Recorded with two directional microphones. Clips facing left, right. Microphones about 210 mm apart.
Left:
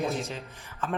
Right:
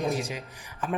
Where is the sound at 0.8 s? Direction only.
15° right (ahead or behind).